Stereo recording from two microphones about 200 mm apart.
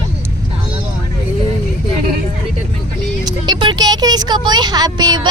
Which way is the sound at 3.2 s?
20° right (ahead or behind).